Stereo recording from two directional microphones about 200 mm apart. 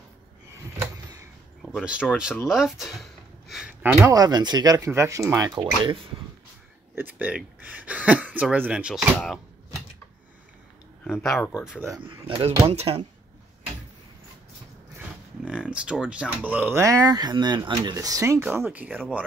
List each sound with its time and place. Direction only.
1.6 s speech: centre (ahead or behind); by 5.9 s 20° right (ahead or behind)
7.0 s speech: 10° right (ahead or behind)
11.1 s speech: centre (ahead or behind)
11.9 s speech: 25° right (ahead or behind)
15.0 s speech: 5° right (ahead or behind)